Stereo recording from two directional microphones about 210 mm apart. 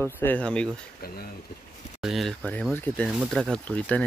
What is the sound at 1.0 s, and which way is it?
Speech, 45° left (ahead or behind).